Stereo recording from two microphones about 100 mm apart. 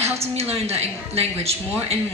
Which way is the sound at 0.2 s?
90° right.